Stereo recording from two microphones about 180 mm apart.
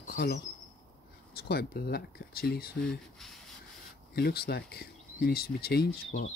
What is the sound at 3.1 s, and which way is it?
Rub, centre (ahead or behind).